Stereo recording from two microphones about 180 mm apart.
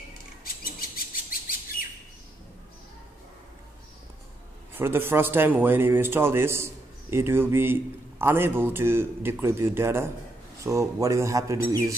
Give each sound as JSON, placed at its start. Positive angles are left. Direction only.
{"t": 0.4, "sound": "bird", "side_deg": 55}
{"t": 4.7, "sound": "a man's voice", "side_deg": -10}